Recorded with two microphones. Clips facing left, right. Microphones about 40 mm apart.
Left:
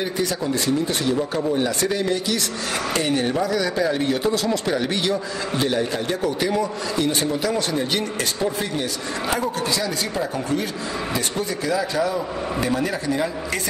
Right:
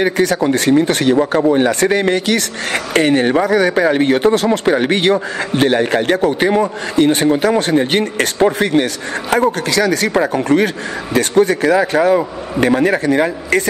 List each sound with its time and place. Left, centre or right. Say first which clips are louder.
0.0 s speech: right 10 dB; right